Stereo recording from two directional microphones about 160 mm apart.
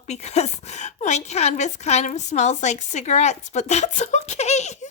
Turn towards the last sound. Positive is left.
turn(degrees=45)  # may be behind; listen again after turning